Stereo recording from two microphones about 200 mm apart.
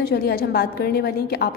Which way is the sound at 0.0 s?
50° left (ahead or behind).